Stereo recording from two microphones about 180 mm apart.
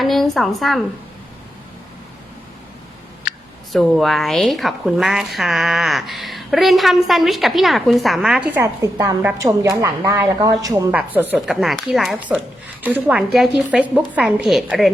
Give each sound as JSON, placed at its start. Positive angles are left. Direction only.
{"t": 0.0, "sound": "a woman's voice", "side_deg": 0}
{"t": 3.7, "sound": "a woman's voice", "side_deg": 0}